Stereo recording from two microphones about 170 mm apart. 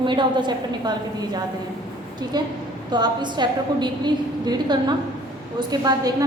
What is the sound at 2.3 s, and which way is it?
A woman's voice, 25° right (ahead or behind).